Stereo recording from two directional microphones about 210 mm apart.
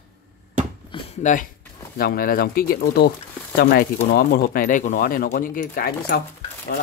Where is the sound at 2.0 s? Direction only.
45° left (ahead or behind).